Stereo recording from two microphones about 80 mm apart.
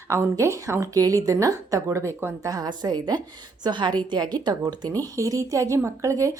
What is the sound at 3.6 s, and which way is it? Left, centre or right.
Speech, right.